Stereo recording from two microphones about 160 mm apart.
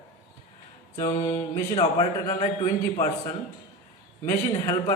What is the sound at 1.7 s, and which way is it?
A man's voice, 35° left (ahead or behind).